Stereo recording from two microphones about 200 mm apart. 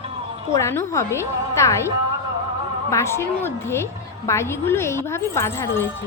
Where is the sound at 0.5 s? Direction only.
15° left (ahead or behind).